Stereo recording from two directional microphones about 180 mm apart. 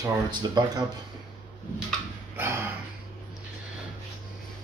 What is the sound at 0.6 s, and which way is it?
Speech, 25° right (ahead or behind).